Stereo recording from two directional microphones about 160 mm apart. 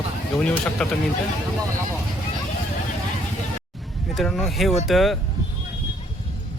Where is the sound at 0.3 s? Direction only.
5° left (ahead or behind).